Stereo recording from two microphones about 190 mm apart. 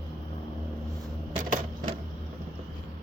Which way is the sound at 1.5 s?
35° right (ahead or behind).